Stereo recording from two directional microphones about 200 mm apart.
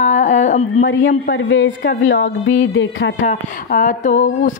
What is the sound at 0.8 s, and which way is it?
A woman's voice, 70° left (ahead or behind).